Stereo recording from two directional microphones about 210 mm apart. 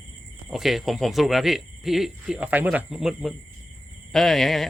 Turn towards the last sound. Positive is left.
turn(degrees=0)  # may be behind; listen again after turning